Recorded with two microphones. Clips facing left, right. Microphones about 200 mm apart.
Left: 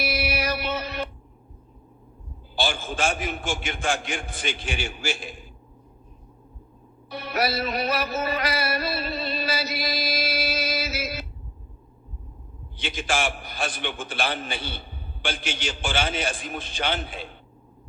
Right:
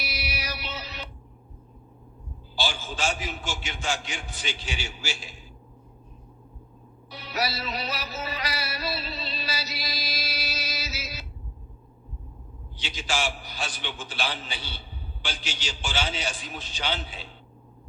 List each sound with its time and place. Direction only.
0.0 s music: 55° left (ahead or behind)
2.6 s a man's voice: 55° left (ahead or behind)
7.1 s music: 55° left (ahead or behind)
12.7 s a man's voice: 55° left (ahead or behind)